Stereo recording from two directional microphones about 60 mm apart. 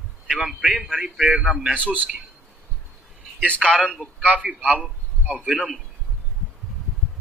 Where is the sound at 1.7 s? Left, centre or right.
Right.